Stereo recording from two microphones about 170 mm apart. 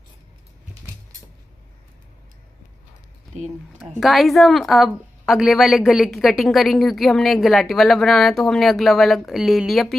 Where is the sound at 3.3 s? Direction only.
45° right (ahead or behind).